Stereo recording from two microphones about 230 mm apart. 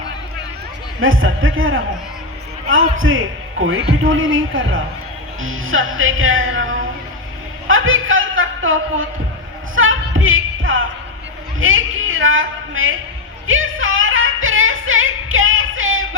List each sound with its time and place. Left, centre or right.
0.9 s music: right
7.7 s a sound: right
9.7 s music: right
11.6 s a man's voice: right
13.5 s music: right